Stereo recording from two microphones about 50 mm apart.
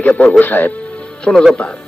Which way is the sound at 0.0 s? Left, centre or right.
Left.